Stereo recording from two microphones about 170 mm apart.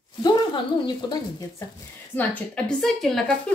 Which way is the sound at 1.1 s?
20° left (ahead or behind).